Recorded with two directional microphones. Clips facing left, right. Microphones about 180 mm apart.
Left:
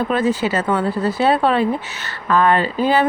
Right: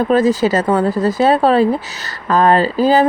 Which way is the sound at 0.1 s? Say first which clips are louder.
Right 5 dB; 40° right (ahead or behind).